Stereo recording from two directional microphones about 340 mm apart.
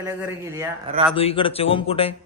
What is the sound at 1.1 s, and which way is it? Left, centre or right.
Speech, centre.